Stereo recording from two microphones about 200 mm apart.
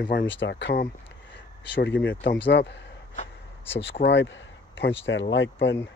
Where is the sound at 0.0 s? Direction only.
55° left (ahead or behind).